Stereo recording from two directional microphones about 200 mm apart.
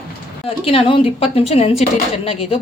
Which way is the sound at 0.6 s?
30° left (ahead or behind).